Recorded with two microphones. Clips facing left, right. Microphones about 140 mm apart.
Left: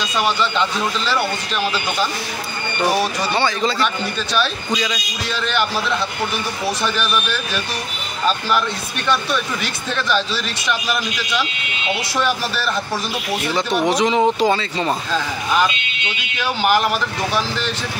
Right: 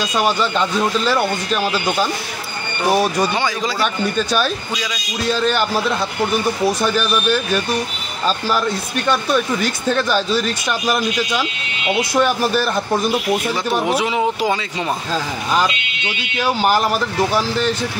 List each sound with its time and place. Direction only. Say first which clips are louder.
0.2 s speech: right 1 dB; 45° right (ahead or behind)
3.3 s speech: left 2 dB; 10° right (ahead or behind)
6.8 s speech: right 3 dB; 40° right (ahead or behind)
9.3 s speech: right 5 dB; 40° right (ahead or behind)
13.8 s speech: left 5 dB; 10° right (ahead or behind)
16.6 s speech: left 1 dB; 35° right (ahead or behind)